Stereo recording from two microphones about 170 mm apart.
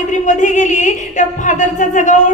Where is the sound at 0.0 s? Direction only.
45° left (ahead or behind).